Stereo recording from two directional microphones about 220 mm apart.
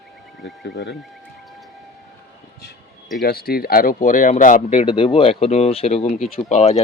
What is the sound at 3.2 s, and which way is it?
Speech, 45° left (ahead or behind).